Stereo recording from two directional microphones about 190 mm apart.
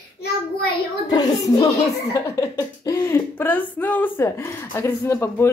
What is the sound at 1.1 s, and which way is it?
A child's voice, 20° left (ahead or behind).